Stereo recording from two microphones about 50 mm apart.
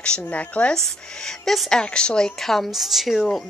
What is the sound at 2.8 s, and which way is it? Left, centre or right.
Speech, centre.